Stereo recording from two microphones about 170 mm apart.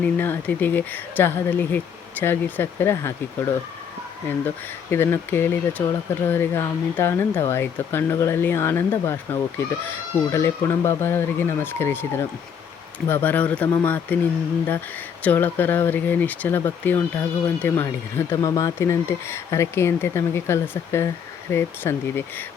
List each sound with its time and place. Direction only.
0.0 s speech: 10° left (ahead or behind)
15.2 s speech: 10° left (ahead or behind)